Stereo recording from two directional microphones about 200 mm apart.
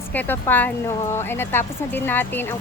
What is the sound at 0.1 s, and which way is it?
Speech, 10° left (ahead or behind).